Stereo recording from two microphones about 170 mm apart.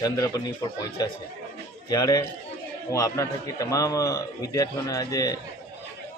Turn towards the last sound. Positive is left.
turn(degrees=20)  # may be behind; listen again after turning